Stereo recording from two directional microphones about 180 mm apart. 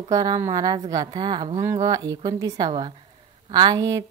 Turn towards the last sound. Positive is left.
turn(degrees=-20)  # may be behind; listen again after turning